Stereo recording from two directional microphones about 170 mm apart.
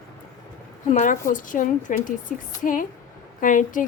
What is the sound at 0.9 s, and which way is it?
A woman's voice, 50° left (ahead or behind).